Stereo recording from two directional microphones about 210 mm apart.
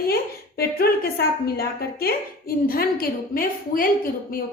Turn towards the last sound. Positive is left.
turn(degrees=45)  # may be behind; listen again after turning